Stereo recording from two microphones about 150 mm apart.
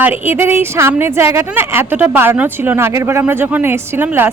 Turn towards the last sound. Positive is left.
turn(degrees=-15)  # may be behind; listen again after turning